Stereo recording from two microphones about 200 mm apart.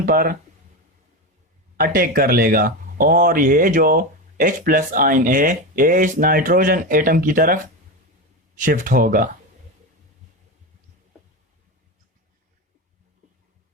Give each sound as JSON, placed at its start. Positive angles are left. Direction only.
{"t": 0.0, "sound": "speech", "side_deg": -45}
{"t": 1.7, "sound": "speech", "side_deg": -45}